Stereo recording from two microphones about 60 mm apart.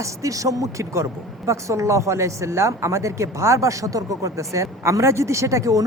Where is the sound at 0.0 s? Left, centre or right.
Right.